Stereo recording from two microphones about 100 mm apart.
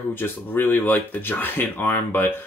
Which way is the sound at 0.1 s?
20° left (ahead or behind).